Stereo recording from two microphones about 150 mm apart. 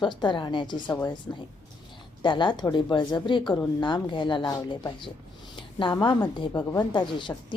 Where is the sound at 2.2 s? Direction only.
30° left (ahead or behind).